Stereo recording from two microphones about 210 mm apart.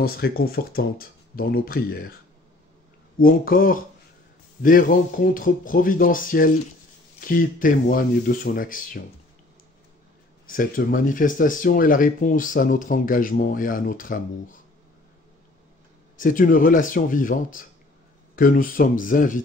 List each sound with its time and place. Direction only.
0.0 s speech: 45° left (ahead or behind)
3.2 s speech: 45° left (ahead or behind)
10.4 s speech: 40° left (ahead or behind)
16.2 s speech: 40° left (ahead or behind)